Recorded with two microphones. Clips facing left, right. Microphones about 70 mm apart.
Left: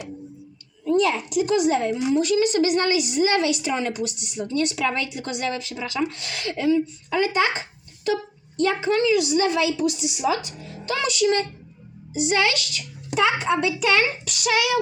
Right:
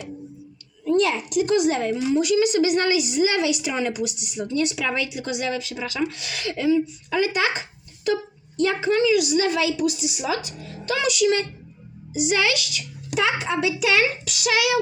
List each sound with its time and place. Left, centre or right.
0.9 s a child's voice: centre
1.8 s speech: centre
2.2 s a child's voice: centre
10.9 s speech: centre
13.1 s a child's voice: centre